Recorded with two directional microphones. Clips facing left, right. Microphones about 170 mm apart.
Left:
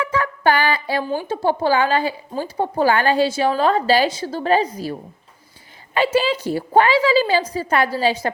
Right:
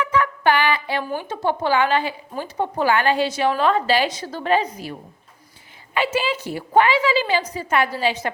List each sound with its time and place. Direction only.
0.0 s speech: 30° left (ahead or behind)